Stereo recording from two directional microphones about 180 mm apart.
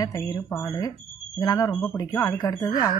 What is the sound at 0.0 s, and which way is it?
Speech, 20° left (ahead or behind).